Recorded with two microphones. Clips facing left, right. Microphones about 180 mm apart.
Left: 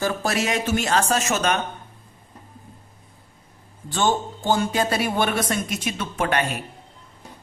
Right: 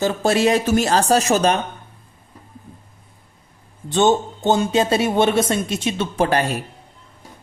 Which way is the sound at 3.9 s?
20° right (ahead or behind).